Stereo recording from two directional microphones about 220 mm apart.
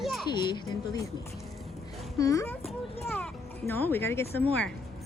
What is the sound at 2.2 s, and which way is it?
Speech, 15° left (ahead or behind).